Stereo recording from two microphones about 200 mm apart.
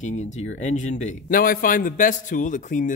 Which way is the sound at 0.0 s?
35° left (ahead or behind).